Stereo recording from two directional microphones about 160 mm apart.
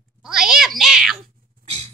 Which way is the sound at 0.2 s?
5° right (ahead or behind).